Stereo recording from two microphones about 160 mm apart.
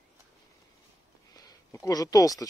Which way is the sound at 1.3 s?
20° left (ahead or behind).